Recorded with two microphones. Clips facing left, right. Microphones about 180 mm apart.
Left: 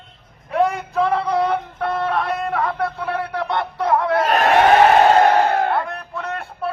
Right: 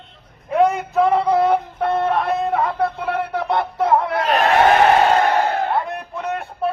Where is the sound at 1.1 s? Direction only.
25° right (ahead or behind).